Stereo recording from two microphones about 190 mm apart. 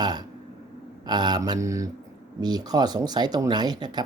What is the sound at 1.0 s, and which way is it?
Speech, 20° right (ahead or behind).